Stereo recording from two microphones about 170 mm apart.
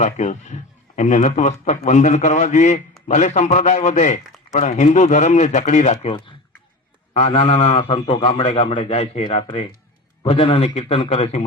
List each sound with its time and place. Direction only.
0.0 s a man's voice: 45° left (ahead or behind)